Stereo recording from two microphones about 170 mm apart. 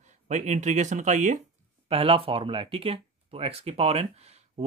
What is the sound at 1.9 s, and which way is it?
Speech, 35° right (ahead or behind).